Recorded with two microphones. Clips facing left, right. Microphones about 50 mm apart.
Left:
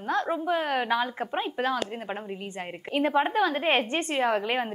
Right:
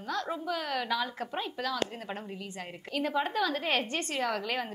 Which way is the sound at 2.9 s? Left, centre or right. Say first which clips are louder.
Left 6 dB; left.